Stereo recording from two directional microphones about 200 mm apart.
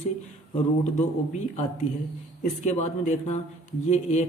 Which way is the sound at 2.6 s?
35° left (ahead or behind).